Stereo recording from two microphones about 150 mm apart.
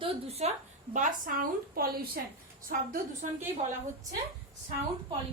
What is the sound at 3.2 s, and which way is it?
Speech, 55° right (ahead or behind).